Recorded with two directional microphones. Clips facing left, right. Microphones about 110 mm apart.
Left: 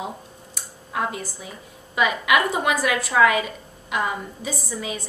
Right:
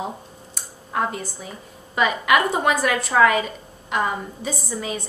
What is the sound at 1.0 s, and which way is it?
A woman's voice, 5° left (ahead or behind).